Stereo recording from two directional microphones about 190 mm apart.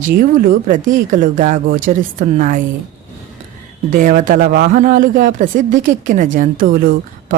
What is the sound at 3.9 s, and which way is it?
A woman's voice, 45° right (ahead or behind).